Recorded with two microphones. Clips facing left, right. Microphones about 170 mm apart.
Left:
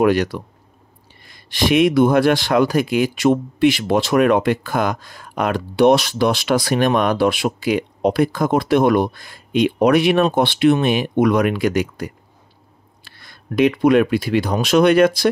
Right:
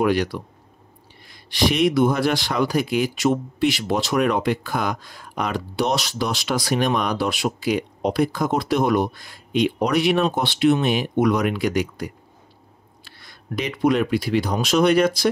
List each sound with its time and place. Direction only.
0.0 s speech: 50° left (ahead or behind)
13.2 s speech: 60° left (ahead or behind)